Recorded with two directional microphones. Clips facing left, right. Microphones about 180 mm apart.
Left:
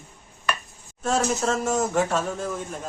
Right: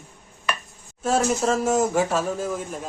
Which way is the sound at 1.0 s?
5° right (ahead or behind).